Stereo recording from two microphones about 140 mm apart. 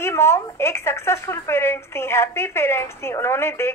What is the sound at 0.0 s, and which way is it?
Speech, 20° left (ahead or behind).